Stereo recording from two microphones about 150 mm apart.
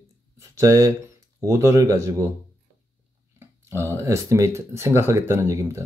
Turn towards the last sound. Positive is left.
turn(degrees=-20)  # may be behind; listen again after turning